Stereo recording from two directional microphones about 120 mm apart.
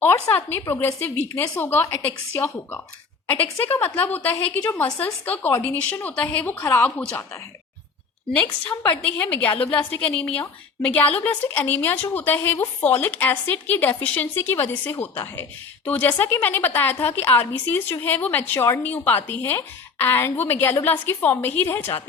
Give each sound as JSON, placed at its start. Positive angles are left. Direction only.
{"t": 0.0, "sound": "a woman's voice", "side_deg": 20}
{"t": 8.4, "sound": "speech", "side_deg": 10}